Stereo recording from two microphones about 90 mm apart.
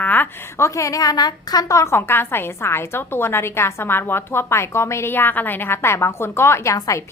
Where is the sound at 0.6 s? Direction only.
35° left (ahead or behind).